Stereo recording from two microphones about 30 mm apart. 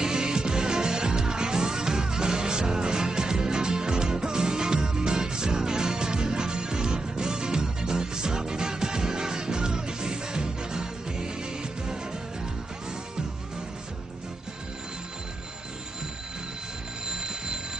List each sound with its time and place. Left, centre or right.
0.0 s music: right
17.1 s vehicle: right